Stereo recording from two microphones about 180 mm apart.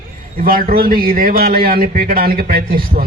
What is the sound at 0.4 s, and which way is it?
A man's voice, 55° right (ahead or behind).